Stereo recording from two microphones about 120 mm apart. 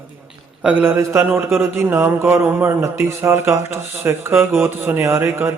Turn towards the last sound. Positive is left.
turn(degrees=-15)  # may be behind; listen again after turning